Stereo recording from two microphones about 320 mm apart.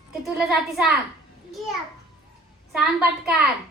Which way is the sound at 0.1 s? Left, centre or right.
Centre.